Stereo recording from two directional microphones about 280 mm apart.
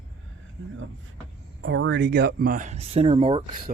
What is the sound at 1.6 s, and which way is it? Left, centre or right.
Speech, right.